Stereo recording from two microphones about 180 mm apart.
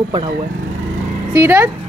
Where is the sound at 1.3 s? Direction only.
10° right (ahead or behind).